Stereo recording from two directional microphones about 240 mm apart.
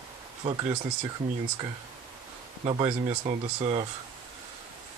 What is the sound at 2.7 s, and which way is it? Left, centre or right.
Speech, right.